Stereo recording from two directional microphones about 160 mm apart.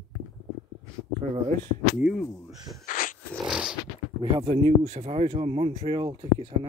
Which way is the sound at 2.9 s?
55° left (ahead or behind).